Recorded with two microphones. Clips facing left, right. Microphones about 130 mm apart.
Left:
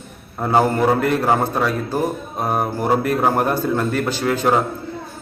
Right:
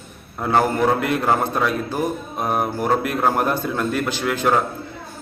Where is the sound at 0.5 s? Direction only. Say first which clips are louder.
Left 2 dB; 10° left (ahead or behind).